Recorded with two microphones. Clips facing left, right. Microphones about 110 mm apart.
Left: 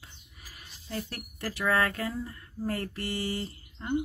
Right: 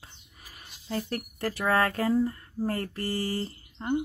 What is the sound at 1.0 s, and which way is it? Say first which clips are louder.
Speech: right 6 dB; 40° right (ahead or behind).